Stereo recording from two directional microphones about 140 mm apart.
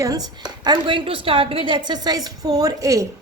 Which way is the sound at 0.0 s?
25° right (ahead or behind).